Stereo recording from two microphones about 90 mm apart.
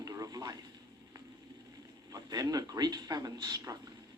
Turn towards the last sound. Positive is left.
turn(degrees=-45)  # may be behind; listen again after turning